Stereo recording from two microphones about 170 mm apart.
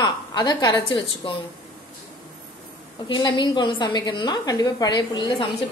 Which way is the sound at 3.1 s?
25° left (ahead or behind).